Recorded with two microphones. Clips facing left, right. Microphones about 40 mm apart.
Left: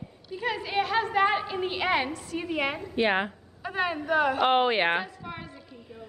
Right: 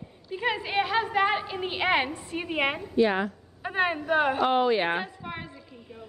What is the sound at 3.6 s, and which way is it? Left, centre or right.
Speech, right.